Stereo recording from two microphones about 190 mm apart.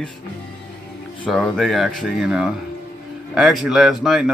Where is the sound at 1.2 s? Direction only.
Centre (ahead or behind).